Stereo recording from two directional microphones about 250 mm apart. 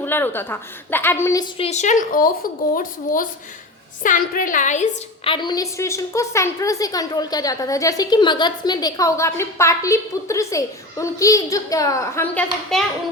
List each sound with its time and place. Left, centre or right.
0.0 s a woman's voice: centre